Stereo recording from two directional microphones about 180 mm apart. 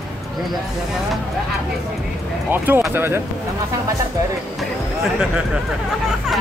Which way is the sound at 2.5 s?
10° right (ahead or behind).